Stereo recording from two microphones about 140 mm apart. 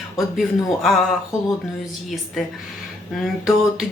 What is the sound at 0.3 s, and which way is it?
Speech, centre (ahead or behind).